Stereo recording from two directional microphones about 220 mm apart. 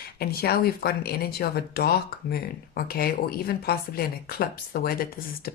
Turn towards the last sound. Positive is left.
turn(degrees=40)  # may be behind; listen again after turning